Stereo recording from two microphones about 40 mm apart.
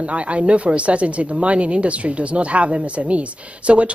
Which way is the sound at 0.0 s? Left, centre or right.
Right.